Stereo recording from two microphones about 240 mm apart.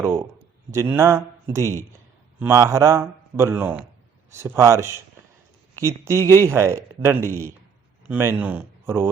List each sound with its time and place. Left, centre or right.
0.0 s a man's voice: centre